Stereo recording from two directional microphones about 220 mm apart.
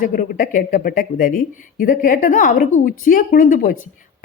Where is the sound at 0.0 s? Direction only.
40° left (ahead or behind).